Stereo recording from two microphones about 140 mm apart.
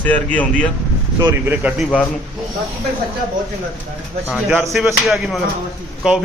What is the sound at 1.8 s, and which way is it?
Speech, 5° left (ahead or behind).